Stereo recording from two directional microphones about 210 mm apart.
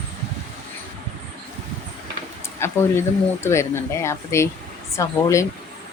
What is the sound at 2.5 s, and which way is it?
Speech, 10° left (ahead or behind).